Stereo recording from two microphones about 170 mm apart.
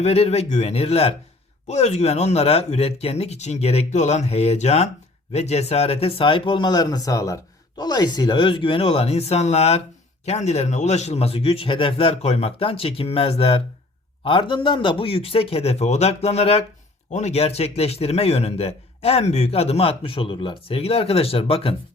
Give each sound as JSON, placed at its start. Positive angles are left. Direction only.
{"t": 0.0, "sound": "a man's voice", "side_deg": 40}